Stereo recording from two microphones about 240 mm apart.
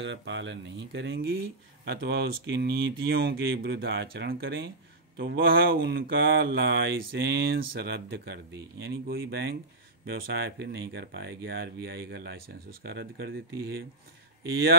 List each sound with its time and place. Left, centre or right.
0.0 s speech: right